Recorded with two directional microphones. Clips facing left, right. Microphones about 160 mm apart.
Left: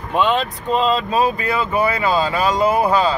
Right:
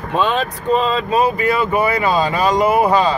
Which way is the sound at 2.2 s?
20° right (ahead or behind).